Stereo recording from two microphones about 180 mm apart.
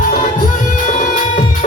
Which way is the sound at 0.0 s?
45° left (ahead or behind).